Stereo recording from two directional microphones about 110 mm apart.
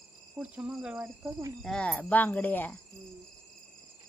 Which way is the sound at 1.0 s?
25° right (ahead or behind).